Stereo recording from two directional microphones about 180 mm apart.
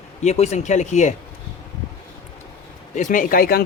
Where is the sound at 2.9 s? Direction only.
45° left (ahead or behind).